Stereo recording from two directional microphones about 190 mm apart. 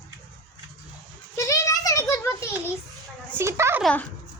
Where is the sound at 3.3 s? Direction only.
15° right (ahead or behind).